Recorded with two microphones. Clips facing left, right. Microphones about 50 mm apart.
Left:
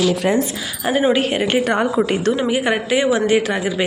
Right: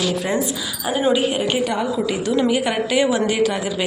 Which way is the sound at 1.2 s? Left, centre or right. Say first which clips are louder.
Left 2 dB; left.